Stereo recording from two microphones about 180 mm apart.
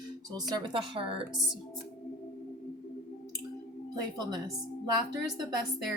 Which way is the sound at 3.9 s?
20° right (ahead or behind).